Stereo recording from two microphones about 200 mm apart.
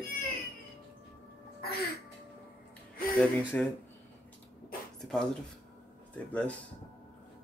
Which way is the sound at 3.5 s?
10° left (ahead or behind).